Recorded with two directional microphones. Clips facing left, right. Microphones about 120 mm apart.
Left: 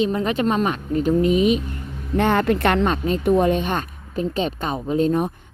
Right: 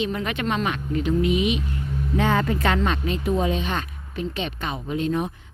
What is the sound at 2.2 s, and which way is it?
A woman's voice, 60° left (ahead or behind).